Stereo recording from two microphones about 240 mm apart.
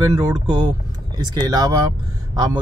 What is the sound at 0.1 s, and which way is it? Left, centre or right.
Speech, centre.